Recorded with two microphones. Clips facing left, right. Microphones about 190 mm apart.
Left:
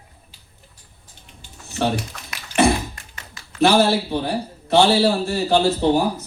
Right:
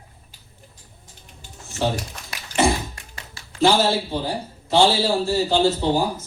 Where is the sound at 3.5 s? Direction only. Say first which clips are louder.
Left 2 dB; 65° left (ahead or behind).